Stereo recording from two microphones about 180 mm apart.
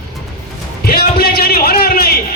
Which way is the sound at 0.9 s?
60° left (ahead or behind).